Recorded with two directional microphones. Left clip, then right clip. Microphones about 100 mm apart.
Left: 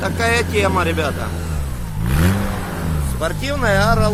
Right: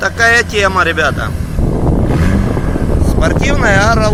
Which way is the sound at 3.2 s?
15° right (ahead or behind).